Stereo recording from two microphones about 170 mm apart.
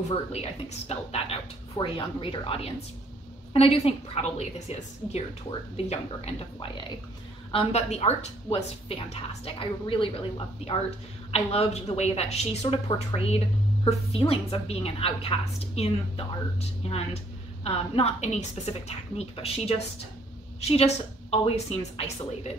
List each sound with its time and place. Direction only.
0.3 s a woman's voice: 40° left (ahead or behind)